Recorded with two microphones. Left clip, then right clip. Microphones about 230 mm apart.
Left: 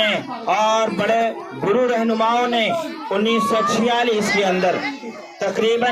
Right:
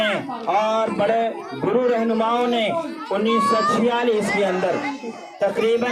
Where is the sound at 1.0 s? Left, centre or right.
Left.